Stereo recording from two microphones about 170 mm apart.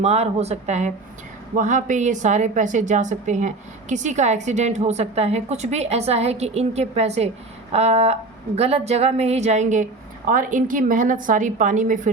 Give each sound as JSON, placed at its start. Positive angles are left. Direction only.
{"t": 0.0, "sound": "a woman's voice", "side_deg": -40}